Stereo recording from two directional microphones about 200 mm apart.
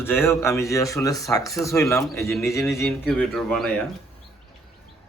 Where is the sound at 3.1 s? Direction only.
Centre (ahead or behind).